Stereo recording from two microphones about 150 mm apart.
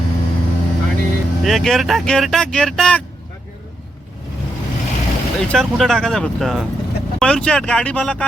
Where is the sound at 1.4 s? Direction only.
Centre (ahead or behind).